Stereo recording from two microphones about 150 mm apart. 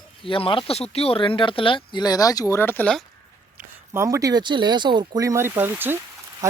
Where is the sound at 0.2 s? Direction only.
35° left (ahead or behind); by 3.0 s 10° left (ahead or behind).